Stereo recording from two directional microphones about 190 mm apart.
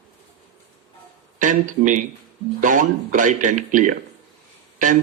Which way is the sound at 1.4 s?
45° right (ahead or behind).